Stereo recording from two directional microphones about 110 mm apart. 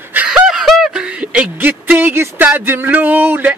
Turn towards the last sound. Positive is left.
turn(degrees=-20)  # may be behind; listen again after turning